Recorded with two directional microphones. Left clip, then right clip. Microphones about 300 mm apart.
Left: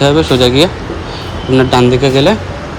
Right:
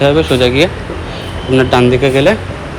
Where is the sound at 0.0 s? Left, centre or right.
Centre.